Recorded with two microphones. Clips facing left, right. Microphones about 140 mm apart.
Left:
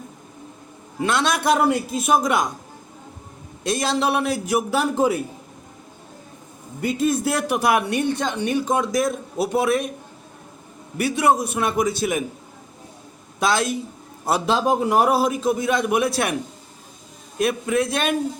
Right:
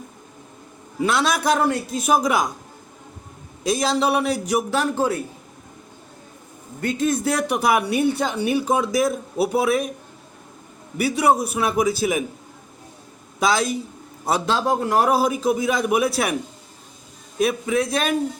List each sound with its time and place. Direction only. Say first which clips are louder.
1.0 s speech: even; 5° right (ahead or behind)
3.6 s speech: right 1 dB; centre (ahead or behind)
6.8 s speech: even; centre (ahead or behind)
10.9 s speech: even; centre (ahead or behind)
13.4 s a man's voice: right 1 dB; centre (ahead or behind)
14.9 s speech: right 2 dB; centre (ahead or behind)
17.4 s speech: even; centre (ahead or behind)